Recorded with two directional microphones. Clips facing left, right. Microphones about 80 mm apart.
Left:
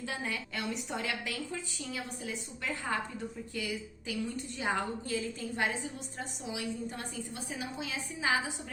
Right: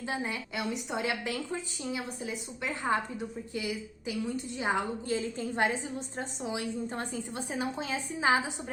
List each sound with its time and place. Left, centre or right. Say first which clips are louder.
0.1 s a woman's voice: right 5 dB; right